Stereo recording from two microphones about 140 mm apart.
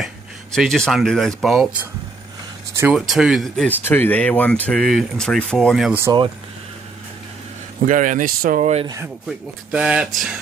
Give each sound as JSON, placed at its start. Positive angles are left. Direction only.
{"t": 0.0, "sound": "speech", "side_deg": 0}
{"t": 2.8, "sound": "speech", "side_deg": -5}
{"t": 3.6, "sound": "speech", "side_deg": 15}
{"t": 7.8, "sound": "speech", "side_deg": -65}
{"t": 9.7, "sound": "speech", "side_deg": -5}